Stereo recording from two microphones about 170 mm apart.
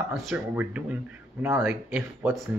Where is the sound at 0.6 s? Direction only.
10° right (ahead or behind).